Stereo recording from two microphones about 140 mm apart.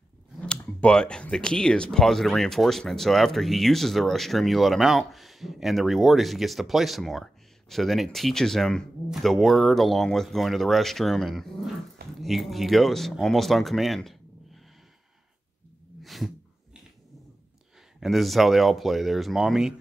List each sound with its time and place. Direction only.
0.7 s speech: 5° left (ahead or behind)
16.0 s a sound: centre (ahead or behind)
18.0 s speech: centre (ahead or behind)